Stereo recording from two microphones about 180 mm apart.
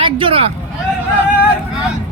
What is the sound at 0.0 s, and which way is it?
Speech, 30° right (ahead or behind).